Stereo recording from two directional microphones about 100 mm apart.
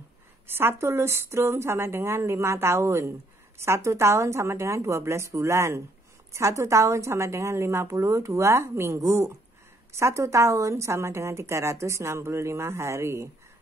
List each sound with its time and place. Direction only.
0.6 s a woman's voice: 25° right (ahead or behind)